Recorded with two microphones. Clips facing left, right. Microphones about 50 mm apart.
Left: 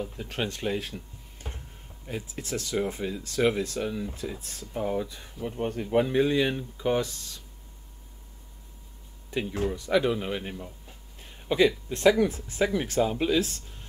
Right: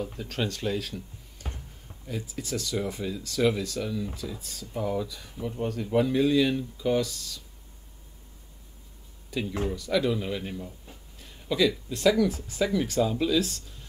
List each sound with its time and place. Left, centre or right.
0.2 s speech: centre
9.3 s speech: left